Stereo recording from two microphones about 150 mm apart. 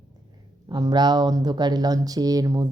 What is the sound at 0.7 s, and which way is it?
Speech, 25° right (ahead or behind).